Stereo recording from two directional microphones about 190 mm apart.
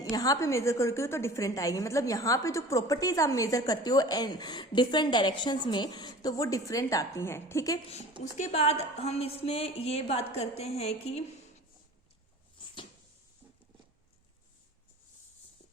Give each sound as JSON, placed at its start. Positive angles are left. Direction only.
{"t": 0.0, "sound": "a woman's voice", "side_deg": 20}
{"t": 8.2, "sound": "a woman's voice", "side_deg": 35}